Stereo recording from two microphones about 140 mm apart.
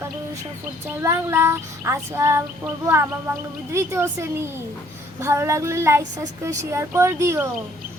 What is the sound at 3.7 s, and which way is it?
Speech, 20° right (ahead or behind).